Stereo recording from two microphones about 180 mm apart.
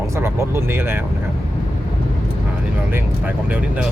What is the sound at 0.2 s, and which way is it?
Speech, 15° right (ahead or behind).